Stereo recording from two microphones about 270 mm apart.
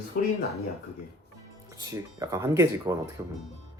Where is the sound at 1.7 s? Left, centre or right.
Centre.